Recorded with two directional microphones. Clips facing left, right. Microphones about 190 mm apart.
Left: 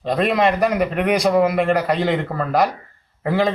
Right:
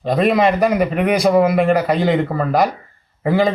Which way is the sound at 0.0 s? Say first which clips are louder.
Right 3 dB; centre (ahead or behind).